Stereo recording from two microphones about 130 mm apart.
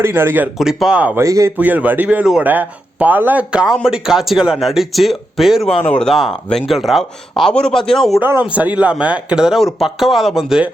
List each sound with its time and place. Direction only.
0.0 s speech: 20° right (ahead or behind)
0.6 s speech: 5° right (ahead or behind)
1.2 s a man's voice: 25° right (ahead or behind)
1.5 s speech: 10° right (ahead or behind)
8.2 s speech: 15° right (ahead or behind)